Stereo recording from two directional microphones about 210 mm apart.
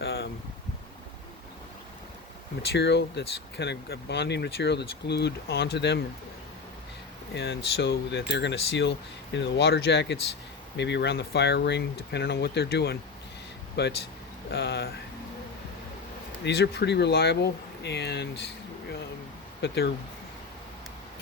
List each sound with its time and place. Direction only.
0.0 s a sound: 50° left (ahead or behind)
2.7 s speech: 55° left (ahead or behind)
7.3 s speech: 50° left (ahead or behind)
16.4 s speech: 50° left (ahead or behind)
19.6 s speech: 50° left (ahead or behind)